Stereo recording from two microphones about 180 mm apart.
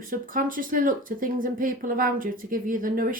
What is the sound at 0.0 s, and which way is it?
Speech, 50° right (ahead or behind).